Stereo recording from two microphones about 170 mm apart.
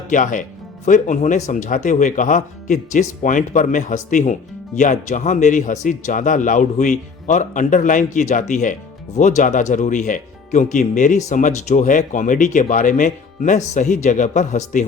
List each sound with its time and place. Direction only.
0.1 s speech: 50° left (ahead or behind)